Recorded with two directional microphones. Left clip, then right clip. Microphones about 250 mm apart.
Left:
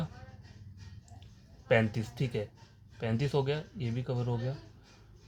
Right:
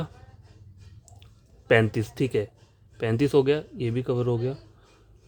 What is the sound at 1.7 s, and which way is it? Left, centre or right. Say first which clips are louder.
Speech: right 7 dB; right.